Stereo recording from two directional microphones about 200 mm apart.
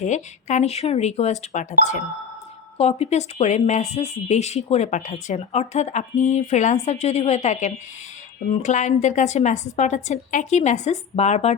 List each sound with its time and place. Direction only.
0.0 s speech: 35° left (ahead or behind)